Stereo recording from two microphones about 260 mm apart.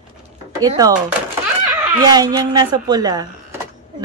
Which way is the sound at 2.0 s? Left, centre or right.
Centre.